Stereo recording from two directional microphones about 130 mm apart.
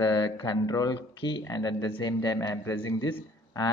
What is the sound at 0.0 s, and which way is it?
Speech, 30° left (ahead or behind).